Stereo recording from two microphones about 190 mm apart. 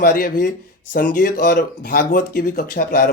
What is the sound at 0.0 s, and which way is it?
Speech, 45° left (ahead or behind).